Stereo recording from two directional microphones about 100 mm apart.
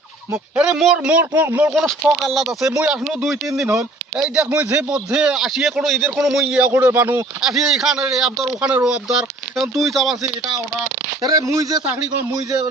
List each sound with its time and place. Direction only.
0.5 s speech: 5° right (ahead or behind)
1.0 s a man's voice: 15° right (ahead or behind)
1.7 s a man's voice: centre (ahead or behind); by 7.3 s 20° right (ahead or behind)
7.4 s speech: 5° right (ahead or behind)
11.2 s speech: 40° right (ahead or behind)